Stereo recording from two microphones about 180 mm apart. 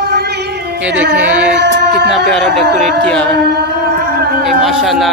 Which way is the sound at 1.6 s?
65° right (ahead or behind).